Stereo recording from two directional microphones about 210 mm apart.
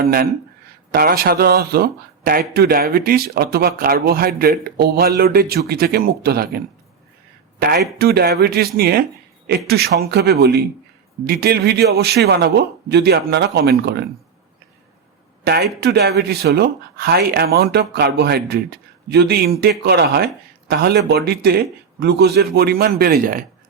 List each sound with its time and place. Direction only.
0.0 s speech: 45° right (ahead or behind)
7.6 s speech: 50° right (ahead or behind)
15.4 s speech: 50° right (ahead or behind)